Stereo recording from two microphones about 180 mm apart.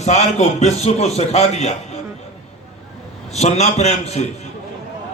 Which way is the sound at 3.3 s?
40° left (ahead or behind).